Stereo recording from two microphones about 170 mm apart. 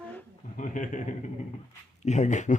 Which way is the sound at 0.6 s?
50° left (ahead or behind).